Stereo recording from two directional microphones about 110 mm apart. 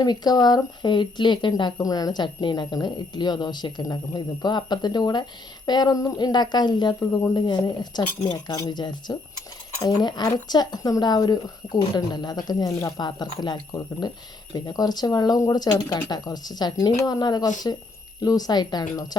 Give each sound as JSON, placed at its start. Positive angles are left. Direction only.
{"t": 0.0, "sound": "speech", "side_deg": 35}